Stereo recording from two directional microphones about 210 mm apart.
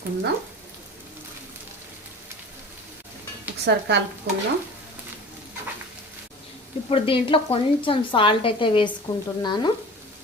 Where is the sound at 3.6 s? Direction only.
55° right (ahead or behind).